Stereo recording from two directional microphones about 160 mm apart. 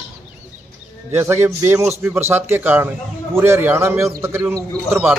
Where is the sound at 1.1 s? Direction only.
15° right (ahead or behind).